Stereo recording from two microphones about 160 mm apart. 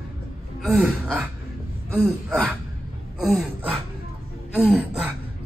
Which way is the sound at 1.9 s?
5° right (ahead or behind).